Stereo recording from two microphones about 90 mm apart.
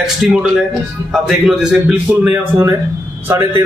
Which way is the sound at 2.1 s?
20° right (ahead or behind).